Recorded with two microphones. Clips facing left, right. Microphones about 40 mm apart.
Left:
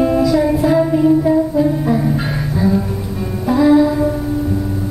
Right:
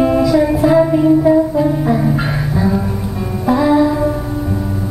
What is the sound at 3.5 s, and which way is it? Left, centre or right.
Music, centre.